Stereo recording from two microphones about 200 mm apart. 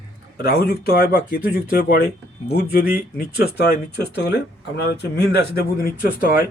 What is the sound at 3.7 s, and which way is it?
Speech, 55° left (ahead or behind).